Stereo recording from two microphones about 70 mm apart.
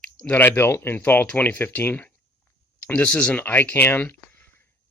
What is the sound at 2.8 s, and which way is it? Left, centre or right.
Speech, centre.